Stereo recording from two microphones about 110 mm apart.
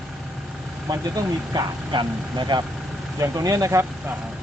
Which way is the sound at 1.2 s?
40° right (ahead or behind).